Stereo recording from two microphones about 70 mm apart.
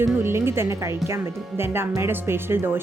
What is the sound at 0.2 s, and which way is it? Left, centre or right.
Speech, right.